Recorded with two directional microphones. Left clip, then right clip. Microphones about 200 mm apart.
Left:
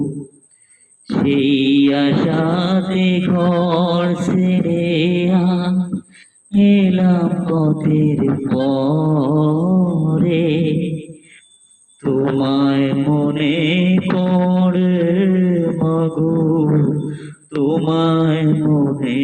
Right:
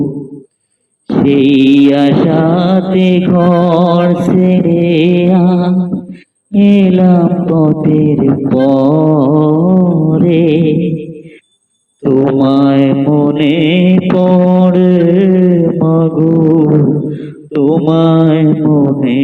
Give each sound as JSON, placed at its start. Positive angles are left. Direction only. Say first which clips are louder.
{"t": 1.0, "sound": "mantra", "louder": "right 7 dB", "side_deg": -40}